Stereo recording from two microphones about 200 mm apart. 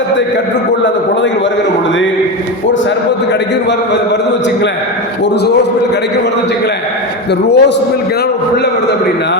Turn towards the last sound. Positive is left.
turn(degrees=60)  # may be behind; listen again after turning